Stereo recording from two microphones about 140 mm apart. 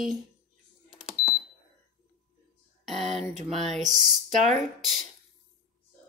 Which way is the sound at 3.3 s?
55° right (ahead or behind).